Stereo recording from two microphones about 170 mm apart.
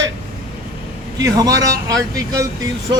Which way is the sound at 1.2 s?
20° right (ahead or behind).